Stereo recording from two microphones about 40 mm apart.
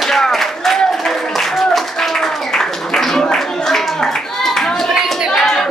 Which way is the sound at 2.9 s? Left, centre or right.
Centre.